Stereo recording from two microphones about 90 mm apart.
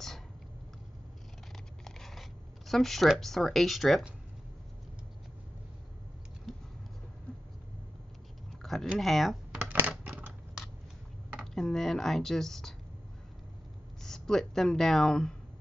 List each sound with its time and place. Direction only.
1.9 s a sound: 5° left (ahead or behind)
2.7 s speech: centre (ahead or behind)
8.9 s speech: centre (ahead or behind)
9.6 s typing: 20° right (ahead or behind)
11.5 s speech: 5° left (ahead or behind)
14.0 s speech: 5° left (ahead or behind)